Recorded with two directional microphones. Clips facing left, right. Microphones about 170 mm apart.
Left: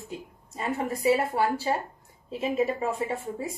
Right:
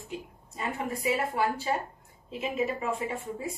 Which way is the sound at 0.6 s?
35° left (ahead or behind).